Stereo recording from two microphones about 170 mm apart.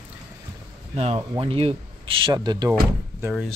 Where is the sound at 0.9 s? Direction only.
35° right (ahead or behind).